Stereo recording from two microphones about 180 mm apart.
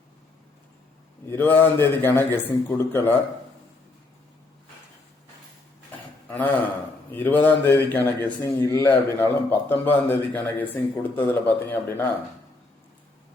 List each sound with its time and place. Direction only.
1.3 s a man's voice: 10° left (ahead or behind)
6.2 s a sound: 10° left (ahead or behind)
7.1 s a man's voice: 10° left (ahead or behind)